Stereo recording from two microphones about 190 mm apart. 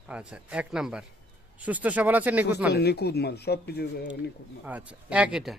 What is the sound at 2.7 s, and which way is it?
Speech, 60° left (ahead or behind).